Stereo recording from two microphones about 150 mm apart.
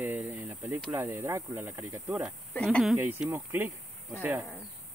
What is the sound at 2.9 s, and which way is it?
Speech, 15° right (ahead or behind).